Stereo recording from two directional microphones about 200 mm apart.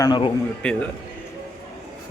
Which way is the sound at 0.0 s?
20° left (ahead or behind).